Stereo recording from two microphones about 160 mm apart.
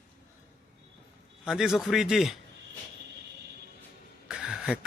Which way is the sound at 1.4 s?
5° right (ahead or behind).